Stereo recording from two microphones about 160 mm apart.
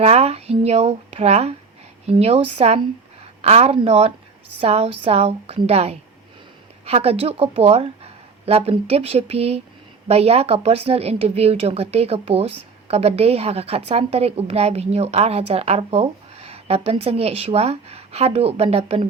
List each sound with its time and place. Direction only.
0.0 s a woman's voice: 40° right (ahead or behind)